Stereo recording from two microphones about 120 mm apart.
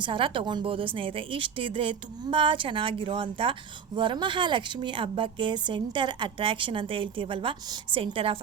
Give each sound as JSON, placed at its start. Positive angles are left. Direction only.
{"t": 0.0, "sound": "a woman's voice", "side_deg": -45}